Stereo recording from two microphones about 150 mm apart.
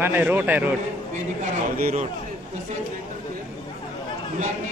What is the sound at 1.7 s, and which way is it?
Speech, 65° right (ahead or behind).